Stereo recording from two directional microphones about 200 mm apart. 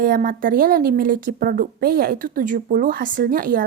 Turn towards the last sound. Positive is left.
turn(degrees=-45)  # may be behind; listen again after turning